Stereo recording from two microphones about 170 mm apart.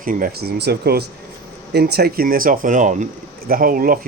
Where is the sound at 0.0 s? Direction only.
55° right (ahead or behind).